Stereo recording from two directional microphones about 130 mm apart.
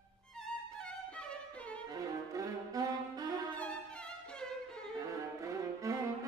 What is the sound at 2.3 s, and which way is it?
Saxophone, 30° right (ahead or behind).